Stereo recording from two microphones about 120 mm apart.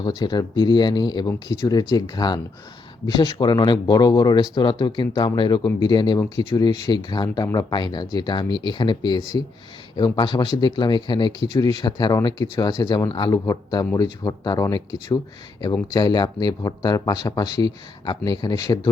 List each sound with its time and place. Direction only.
0.0 s speech: 35° left (ahead or behind)